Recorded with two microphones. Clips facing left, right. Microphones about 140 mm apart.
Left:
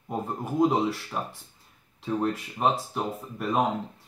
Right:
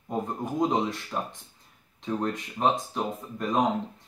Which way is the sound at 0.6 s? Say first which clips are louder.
Left 3 dB; 5° left (ahead or behind).